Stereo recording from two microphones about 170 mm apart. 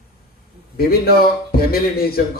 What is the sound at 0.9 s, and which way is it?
A man's voice, 65° left (ahead or behind).